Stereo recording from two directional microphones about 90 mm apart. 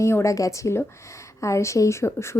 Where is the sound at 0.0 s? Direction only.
35° left (ahead or behind).